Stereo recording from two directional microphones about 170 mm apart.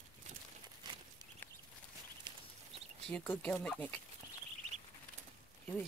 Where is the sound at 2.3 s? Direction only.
25° right (ahead or behind).